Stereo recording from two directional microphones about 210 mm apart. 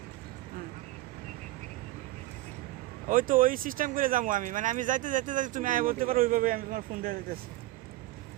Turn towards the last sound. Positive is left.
turn(degrees=-40)  # may be behind; listen again after turning